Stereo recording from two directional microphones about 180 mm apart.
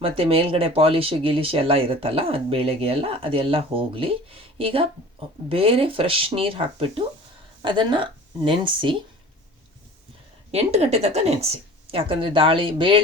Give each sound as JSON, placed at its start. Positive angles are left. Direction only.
{"t": 0.0, "sound": "speech", "side_deg": -30}
{"t": 10.5, "sound": "speech", "side_deg": -35}